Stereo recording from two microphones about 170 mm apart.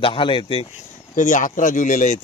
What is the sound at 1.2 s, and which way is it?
Speech, 50° left (ahead or behind).